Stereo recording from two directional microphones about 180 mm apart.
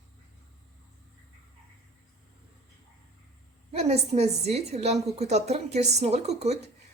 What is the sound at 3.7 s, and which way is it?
A woman's voice, 35° right (ahead or behind).